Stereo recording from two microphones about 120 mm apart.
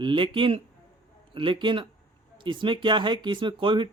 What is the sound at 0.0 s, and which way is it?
Speech, 45° right (ahead or behind).